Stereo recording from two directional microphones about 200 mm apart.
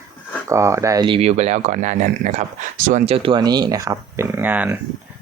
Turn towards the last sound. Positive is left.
turn(degrees=-10)  # may be behind; listen again after turning